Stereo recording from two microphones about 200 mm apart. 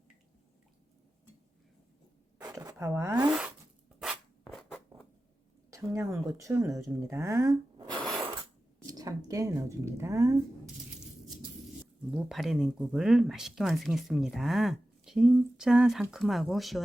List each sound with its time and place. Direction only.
2.4 s zipper: 15° right (ahead or behind); by 4.8 s centre (ahead or behind)
5.7 s speech: 15° right (ahead or behind)
8.9 s speech: 20° right (ahead or behind)
12.1 s speech: centre (ahead or behind)